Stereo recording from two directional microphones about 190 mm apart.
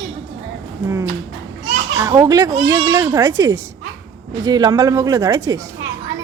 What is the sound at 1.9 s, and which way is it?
Speech, 15° right (ahead or behind).